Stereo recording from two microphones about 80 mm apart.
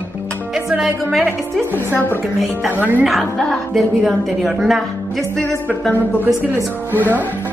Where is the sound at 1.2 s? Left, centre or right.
Right.